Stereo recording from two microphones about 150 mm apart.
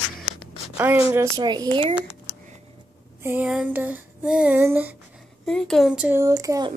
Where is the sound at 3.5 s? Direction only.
10° right (ahead or behind).